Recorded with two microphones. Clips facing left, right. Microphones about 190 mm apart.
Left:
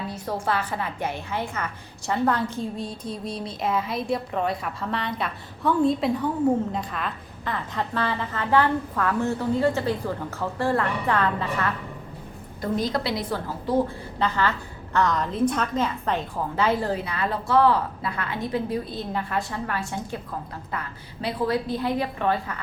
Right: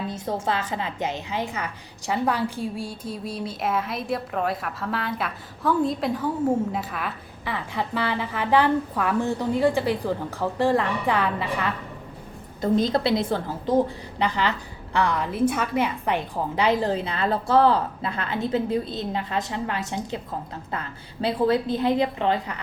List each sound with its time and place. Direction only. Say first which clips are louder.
0.1 s a woman's voice: left 2 dB; 25° right (ahead or behind)
12.6 s a woman's voice: right 4 dB; 25° right (ahead or behind)
14.2 s a woman's voice: even; 15° right (ahead or behind)